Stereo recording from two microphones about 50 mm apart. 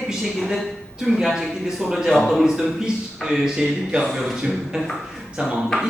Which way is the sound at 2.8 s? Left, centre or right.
Centre.